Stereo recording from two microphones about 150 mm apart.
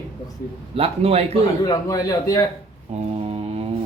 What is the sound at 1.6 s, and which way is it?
Speech, 25° left (ahead or behind).